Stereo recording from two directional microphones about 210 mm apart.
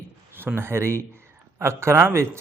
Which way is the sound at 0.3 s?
10° right (ahead or behind).